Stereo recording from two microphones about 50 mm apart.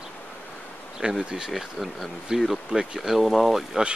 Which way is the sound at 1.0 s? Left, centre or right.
Centre.